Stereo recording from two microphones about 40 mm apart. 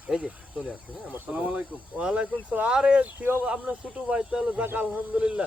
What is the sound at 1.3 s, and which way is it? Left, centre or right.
Speech, right.